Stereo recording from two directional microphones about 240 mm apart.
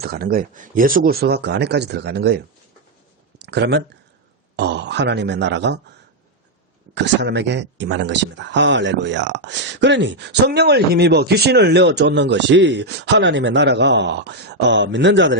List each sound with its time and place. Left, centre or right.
0.0 s speech: right
6.9 s speech: right